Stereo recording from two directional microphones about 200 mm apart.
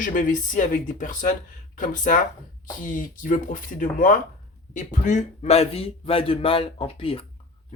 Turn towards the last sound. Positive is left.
turn(degrees=25)  # may be behind; listen again after turning